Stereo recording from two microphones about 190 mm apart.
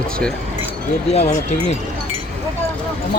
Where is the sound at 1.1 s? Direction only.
35° left (ahead or behind).